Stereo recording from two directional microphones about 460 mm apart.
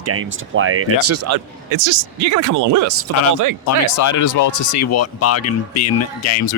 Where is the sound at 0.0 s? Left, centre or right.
Right.